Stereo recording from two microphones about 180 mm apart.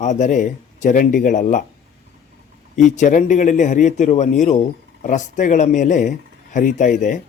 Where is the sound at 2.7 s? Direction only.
40° left (ahead or behind).